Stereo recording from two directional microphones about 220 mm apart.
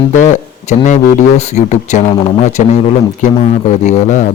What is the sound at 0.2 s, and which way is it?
A man's voice, 35° left (ahead or behind).